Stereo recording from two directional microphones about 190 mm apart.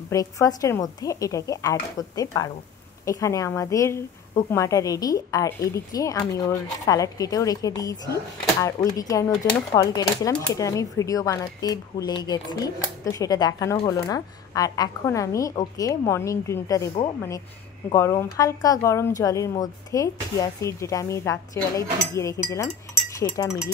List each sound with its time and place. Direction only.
0.1 s speech: 15° left (ahead or behind)
17.9 s speech: 15° left (ahead or behind)